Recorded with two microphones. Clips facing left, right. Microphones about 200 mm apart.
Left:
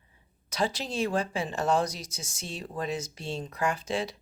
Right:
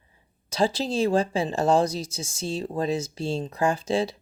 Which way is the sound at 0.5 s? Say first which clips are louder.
Right 6 dB; 30° right (ahead or behind).